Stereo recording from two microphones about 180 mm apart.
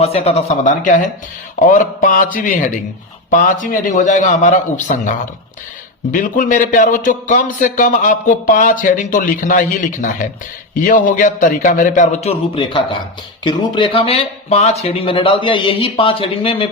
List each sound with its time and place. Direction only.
0.0 s a man's voice: 35° left (ahead or behind)